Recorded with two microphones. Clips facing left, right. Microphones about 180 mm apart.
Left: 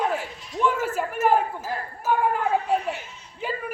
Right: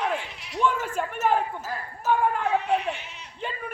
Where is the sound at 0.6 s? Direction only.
5° left (ahead or behind).